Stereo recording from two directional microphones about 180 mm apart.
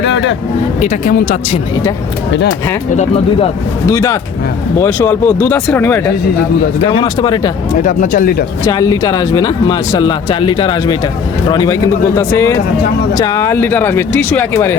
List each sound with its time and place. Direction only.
0.0 s a sound: 90° left
0.8 s speech: 45° left (ahead or behind)
2.9 s speech: 35° left (ahead or behind)
3.8 s speech: 15° left (ahead or behind)
6.9 s speech: 25° left (ahead or behind)
7.8 s speech: 50° left (ahead or behind)
8.6 s speech: 20° left (ahead or behind)